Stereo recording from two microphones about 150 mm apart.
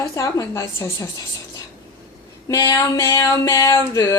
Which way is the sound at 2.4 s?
20° left (ahead or behind).